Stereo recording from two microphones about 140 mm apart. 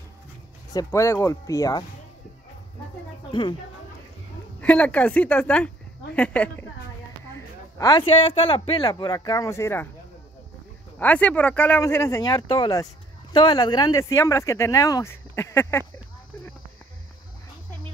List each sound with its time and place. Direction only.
0.7 s speech: 20° left (ahead or behind)
3.3 s speech: 35° left (ahead or behind)
4.6 s speech: 10° left (ahead or behind)
7.3 s a sound: 25° left (ahead or behind)
8.0 s speech: 40° left (ahead or behind); by 9.8 s 20° left (ahead or behind)
11.0 s speech: 10° left (ahead or behind)
11.8 s speech: 20° left (ahead or behind)